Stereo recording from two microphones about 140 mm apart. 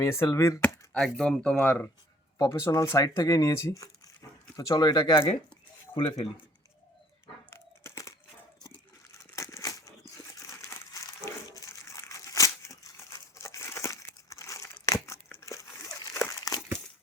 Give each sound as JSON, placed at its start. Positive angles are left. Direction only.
{"t": 0.0, "sound": "speech", "side_deg": 20}
{"t": 0.9, "sound": "speech", "side_deg": 5}
{"t": 7.5, "sound": "crumpling", "side_deg": 20}
{"t": 9.3, "sound": "crumpling", "side_deg": 20}